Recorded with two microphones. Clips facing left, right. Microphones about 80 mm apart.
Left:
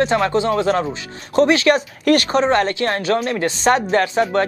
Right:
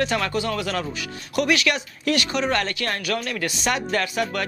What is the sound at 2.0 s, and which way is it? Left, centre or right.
Speech, left.